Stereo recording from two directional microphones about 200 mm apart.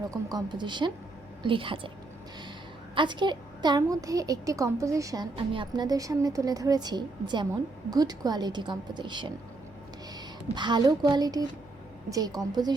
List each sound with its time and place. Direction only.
0.3 s a woman's voice: 20° right (ahead or behind)
2.9 s a woman's voice: 25° right (ahead or behind)
10.5 s a woman's voice: 20° right (ahead or behind)